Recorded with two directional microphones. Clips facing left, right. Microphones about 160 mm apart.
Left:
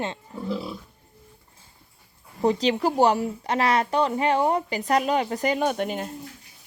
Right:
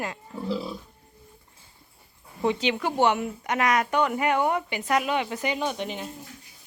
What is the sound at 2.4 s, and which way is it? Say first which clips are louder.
A woman's voice: left 4 dB; 35° left (ahead or behind).